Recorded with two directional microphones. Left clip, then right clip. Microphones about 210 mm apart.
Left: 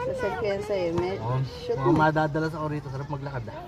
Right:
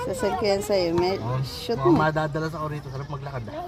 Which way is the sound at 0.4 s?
55° right (ahead or behind).